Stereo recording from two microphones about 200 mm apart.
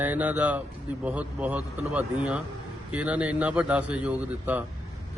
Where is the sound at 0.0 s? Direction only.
10° right (ahead or behind).